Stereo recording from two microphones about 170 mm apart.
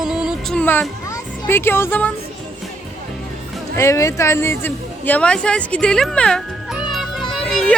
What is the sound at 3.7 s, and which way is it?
A woman's voice, 15° left (ahead or behind).